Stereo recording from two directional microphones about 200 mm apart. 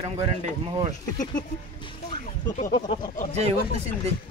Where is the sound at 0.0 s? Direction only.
30° right (ahead or behind).